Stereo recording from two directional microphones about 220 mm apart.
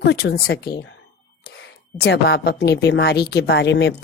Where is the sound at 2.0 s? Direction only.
50° left (ahead or behind).